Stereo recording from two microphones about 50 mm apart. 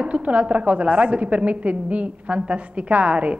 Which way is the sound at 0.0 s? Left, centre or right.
Right.